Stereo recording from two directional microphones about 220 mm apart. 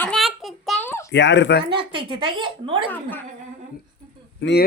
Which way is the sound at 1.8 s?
25° right (ahead or behind).